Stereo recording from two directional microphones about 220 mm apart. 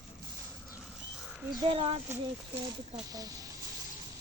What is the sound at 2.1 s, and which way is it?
Speech, 10° right (ahead or behind).